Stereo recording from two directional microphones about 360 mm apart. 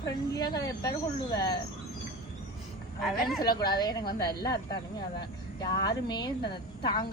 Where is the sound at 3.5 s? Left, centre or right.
Left.